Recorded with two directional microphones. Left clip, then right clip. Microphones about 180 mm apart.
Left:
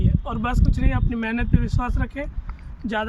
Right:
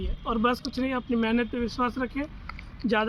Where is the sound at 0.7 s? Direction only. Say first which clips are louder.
Even; 50° left (ahead or behind).